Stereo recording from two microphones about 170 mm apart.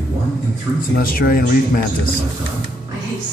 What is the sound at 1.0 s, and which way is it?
Speech, 60° left (ahead or behind).